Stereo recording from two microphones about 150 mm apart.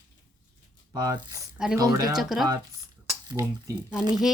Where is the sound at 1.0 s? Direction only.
25° right (ahead or behind).